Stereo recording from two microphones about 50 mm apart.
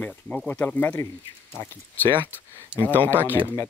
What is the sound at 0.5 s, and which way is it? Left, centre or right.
Speech, left.